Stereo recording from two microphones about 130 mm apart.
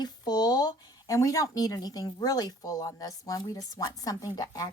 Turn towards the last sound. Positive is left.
turn(degrees=30)  # may be behind; listen again after turning